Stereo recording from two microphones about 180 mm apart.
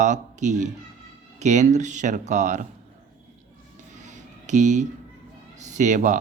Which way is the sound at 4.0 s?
40° right (ahead or behind).